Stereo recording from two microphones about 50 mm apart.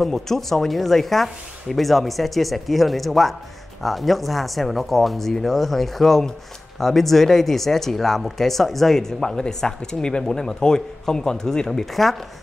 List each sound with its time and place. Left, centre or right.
0.0 s speech: centre